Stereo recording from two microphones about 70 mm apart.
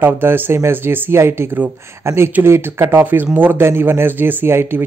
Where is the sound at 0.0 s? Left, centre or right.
Right.